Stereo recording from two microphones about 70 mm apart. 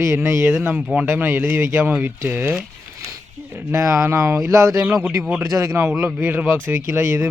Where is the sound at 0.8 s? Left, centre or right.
Centre.